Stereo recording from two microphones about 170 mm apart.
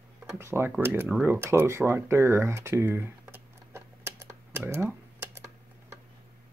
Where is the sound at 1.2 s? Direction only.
15° right (ahead or behind).